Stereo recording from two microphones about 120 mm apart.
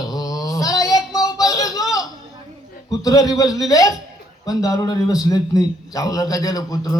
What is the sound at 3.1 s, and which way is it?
A man's voice, 30° left (ahead or behind).